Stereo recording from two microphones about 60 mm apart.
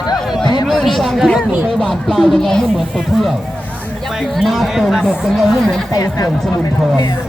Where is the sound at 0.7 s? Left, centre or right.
Centre.